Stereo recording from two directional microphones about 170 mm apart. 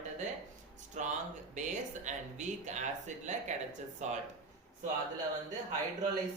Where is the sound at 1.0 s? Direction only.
45° right (ahead or behind).